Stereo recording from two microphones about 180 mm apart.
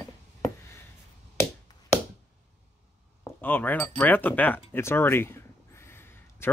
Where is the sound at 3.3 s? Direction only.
10° left (ahead or behind).